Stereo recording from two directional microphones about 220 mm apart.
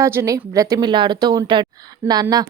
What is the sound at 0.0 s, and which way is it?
Speech, 10° right (ahead or behind).